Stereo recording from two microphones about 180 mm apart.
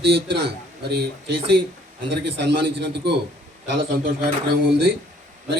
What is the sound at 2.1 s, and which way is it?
A man's voice, 70° right (ahead or behind).